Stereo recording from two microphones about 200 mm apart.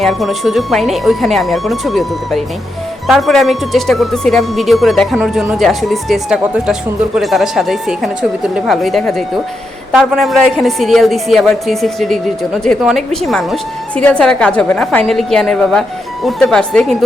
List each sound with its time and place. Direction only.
0.0 s a woman's voice: centre (ahead or behind)